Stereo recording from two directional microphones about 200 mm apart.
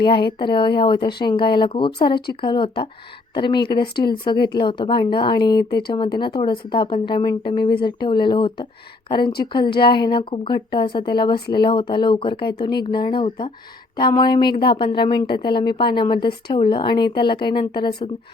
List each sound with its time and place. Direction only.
0.0 s speech: 25° left (ahead or behind)